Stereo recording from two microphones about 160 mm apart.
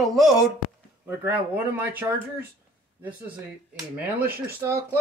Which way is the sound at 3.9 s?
10° right (ahead or behind).